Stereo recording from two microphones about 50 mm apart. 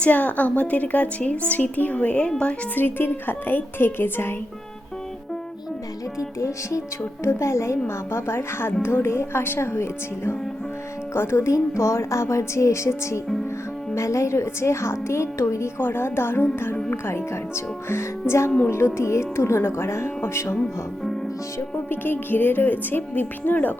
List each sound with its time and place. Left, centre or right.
0.0 s a woman's voice: left
2.7 s speech: left
6.1 s music: left
7.0 s speech: left
7.9 s speech: left
13.9 s speech: left
15.8 s speech: left
21.8 s a woman's voice: left